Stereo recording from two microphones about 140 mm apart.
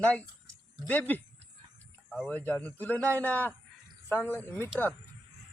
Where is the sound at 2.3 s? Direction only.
10° left (ahead or behind).